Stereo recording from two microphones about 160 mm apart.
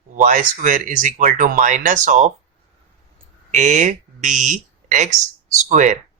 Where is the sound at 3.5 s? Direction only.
45° right (ahead or behind).